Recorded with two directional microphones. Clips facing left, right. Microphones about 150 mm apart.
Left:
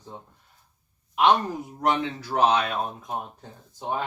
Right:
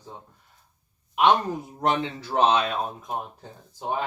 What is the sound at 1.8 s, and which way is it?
Speech, 25° right (ahead or behind).